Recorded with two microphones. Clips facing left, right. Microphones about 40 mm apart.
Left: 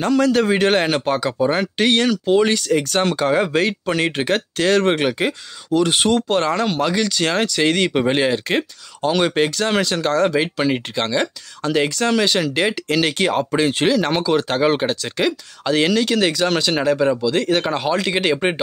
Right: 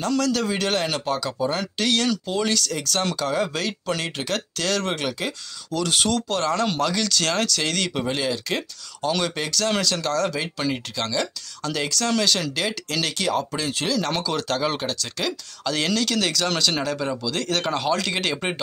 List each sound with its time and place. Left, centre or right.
0.1 s speech: left
6.5 s speech: centre; by 13.9 s left
13.9 s speech: left